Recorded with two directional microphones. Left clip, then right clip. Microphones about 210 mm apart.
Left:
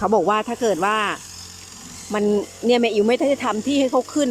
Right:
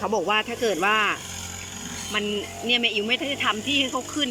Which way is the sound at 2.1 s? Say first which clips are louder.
Left 7 dB; 20° left (ahead or behind).